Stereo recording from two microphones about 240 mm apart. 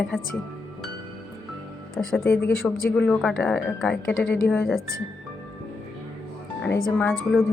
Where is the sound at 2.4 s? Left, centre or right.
Left.